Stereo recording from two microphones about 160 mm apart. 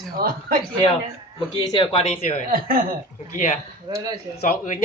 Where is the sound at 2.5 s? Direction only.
65° right (ahead or behind).